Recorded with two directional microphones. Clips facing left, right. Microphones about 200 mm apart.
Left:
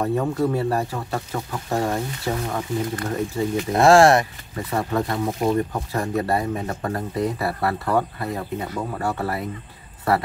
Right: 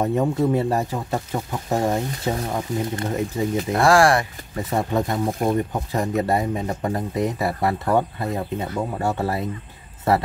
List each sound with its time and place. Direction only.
0.0 s speech: 20° right (ahead or behind)
3.7 s speech: 25° left (ahead or behind)
4.6 s speech: 20° right (ahead or behind)